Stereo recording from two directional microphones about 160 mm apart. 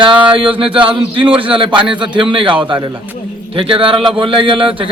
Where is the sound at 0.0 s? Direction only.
30° right (ahead or behind).